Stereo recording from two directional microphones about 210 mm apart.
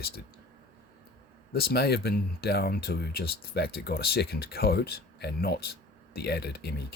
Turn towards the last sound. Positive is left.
turn(degrees=50)  # may be behind; listen again after turning